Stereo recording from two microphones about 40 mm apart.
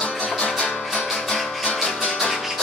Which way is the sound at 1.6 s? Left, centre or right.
Centre.